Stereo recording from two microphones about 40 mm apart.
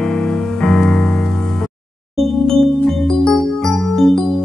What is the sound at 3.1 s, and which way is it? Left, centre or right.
Music, centre.